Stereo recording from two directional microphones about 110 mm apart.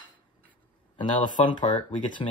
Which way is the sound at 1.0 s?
45° left (ahead or behind).